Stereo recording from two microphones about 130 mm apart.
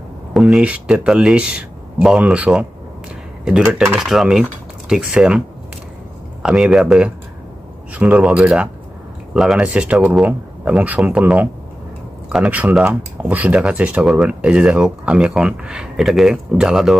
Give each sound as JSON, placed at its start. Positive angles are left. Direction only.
{"t": 0.3, "sound": "speech", "side_deg": 0}
{"t": 6.4, "sound": "speech", "side_deg": -5}